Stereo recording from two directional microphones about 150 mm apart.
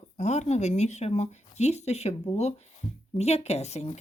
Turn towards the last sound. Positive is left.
turn(degrees=45)  # may be behind; listen again after turning